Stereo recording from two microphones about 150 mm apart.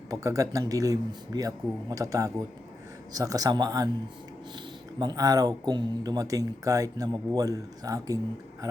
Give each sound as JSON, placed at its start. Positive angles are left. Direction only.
{"t": 0.1, "sound": "speech", "side_deg": -20}